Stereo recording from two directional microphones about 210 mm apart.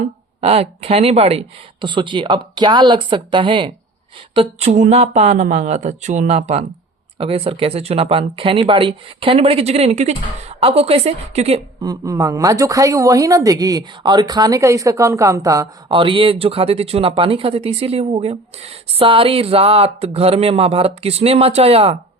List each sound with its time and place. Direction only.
0.4 s a woman's voice: 30° right (ahead or behind)
11.8 s a woman's voice: 15° right (ahead or behind)